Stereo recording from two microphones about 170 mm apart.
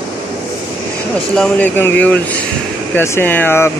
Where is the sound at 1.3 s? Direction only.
5° left (ahead or behind).